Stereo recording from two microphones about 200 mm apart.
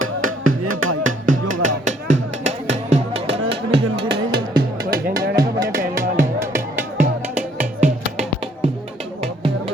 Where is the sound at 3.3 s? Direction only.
60° right (ahead or behind).